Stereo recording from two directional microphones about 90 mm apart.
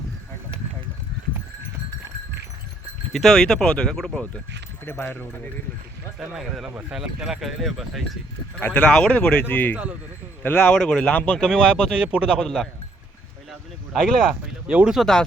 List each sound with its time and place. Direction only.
3.1 s speech: 5° left (ahead or behind)
4.9 s speech: 25° left (ahead or behind)
6.1 s speech: 5° right (ahead or behind)
8.6 s speech: 15° left (ahead or behind)
10.8 s speech: 10° left (ahead or behind)
13.5 s a sound: 5° left (ahead or behind)
14.7 s speech: 10° right (ahead or behind)
15.0 s speech: 5° left (ahead or behind)